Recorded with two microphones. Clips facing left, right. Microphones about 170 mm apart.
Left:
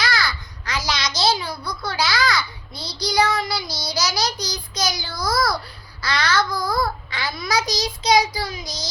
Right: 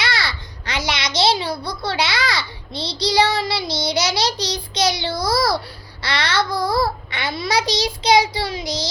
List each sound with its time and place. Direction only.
0.0 s babbling: 30° right (ahead or behind)
3.0 s child singing: 30° right (ahead or behind)